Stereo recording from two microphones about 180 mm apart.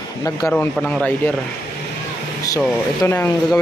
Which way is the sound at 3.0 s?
15° left (ahead or behind).